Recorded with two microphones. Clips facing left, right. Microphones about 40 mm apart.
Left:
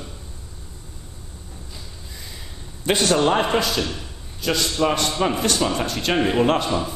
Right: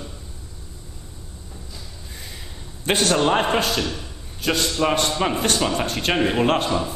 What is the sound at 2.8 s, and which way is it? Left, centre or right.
Speech, right.